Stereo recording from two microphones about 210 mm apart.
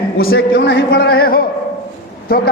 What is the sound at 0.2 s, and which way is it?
Speech, 45° left (ahead or behind).